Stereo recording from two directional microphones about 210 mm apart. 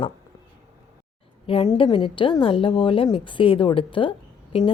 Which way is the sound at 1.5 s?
20° left (ahead or behind).